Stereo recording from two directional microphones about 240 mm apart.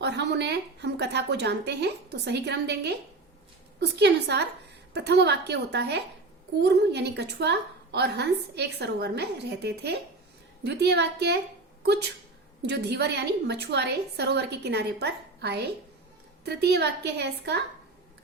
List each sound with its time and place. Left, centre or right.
0.0 s a woman's voice: right